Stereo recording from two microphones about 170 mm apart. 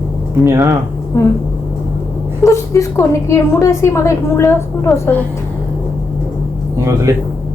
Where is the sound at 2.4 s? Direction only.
15° left (ahead or behind).